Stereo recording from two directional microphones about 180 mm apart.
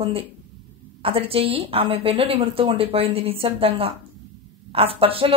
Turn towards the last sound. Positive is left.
turn(degrees=-30)  # may be behind; listen again after turning